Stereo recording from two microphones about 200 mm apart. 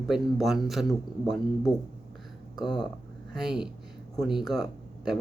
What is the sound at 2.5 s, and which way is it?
Speech, 20° left (ahead or behind).